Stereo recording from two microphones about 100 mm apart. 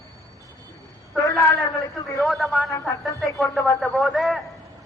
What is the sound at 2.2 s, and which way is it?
A man's voice, centre (ahead or behind).